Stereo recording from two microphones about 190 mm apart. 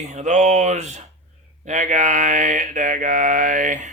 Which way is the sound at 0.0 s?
40° right (ahead or behind).